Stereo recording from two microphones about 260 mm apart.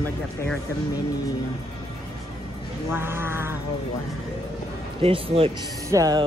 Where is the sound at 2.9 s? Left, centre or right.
Centre.